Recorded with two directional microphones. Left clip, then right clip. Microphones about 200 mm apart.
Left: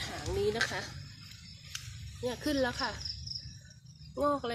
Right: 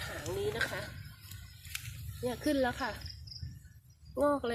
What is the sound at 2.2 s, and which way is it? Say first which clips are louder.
Speech: even; centre (ahead or behind).